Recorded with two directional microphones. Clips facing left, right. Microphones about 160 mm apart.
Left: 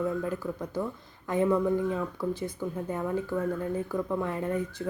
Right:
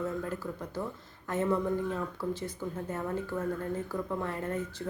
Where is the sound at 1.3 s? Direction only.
15° left (ahead or behind).